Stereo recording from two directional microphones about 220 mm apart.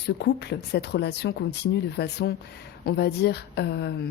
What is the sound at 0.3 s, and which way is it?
A woman's voice, 50° left (ahead or behind).